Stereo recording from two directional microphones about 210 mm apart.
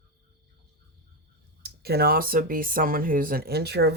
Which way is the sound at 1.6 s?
50° right (ahead or behind).